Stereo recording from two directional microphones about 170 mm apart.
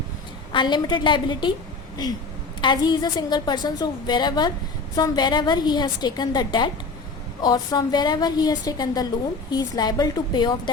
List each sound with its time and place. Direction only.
0.5 s a woman's voice: 25° left (ahead or behind)
2.6 s a woman's voice: 25° left (ahead or behind)